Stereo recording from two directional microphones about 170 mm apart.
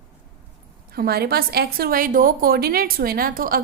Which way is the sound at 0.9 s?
65° right (ahead or behind).